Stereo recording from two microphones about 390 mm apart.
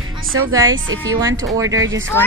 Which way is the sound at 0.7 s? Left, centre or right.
Right.